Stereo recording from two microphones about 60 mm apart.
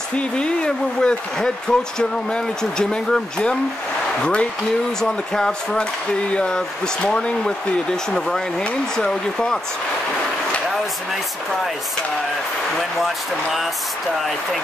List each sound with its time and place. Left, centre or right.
0.1 s speech: centre
13.0 s speech: centre